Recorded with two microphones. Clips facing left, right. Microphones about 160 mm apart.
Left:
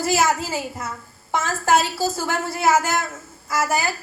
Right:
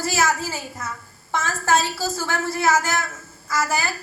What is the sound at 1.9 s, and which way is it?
Speech, 15° left (ahead or behind).